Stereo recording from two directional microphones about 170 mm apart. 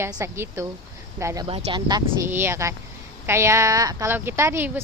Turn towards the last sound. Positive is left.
turn(degrees=-10)  # may be behind; listen again after turning